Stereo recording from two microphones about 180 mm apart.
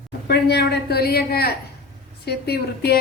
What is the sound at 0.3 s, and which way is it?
Speech, 65° left (ahead or behind).